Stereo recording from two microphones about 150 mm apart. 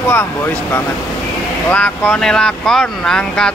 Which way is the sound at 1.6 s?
10° left (ahead or behind).